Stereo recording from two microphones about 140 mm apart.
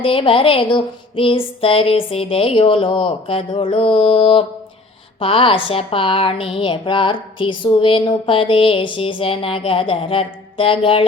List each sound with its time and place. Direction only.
0.0 s speech: 40° left (ahead or behind)